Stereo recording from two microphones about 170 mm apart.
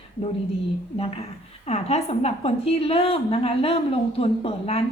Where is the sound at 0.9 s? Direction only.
35° left (ahead or behind).